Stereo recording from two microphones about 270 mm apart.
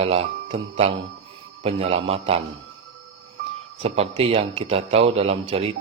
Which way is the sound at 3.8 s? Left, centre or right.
Right.